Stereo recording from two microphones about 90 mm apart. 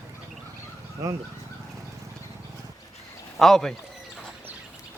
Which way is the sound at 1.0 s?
40° right (ahead or behind).